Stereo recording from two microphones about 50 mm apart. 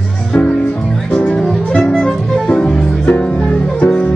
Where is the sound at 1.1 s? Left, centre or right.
Left.